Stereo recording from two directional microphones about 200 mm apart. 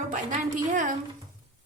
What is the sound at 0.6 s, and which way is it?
Speech, 40° right (ahead or behind).